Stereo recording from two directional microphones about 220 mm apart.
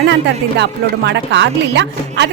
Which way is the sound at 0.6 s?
50° right (ahead or behind).